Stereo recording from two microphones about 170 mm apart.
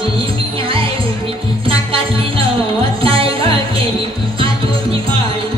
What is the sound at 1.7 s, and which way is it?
Music, 30° right (ahead or behind).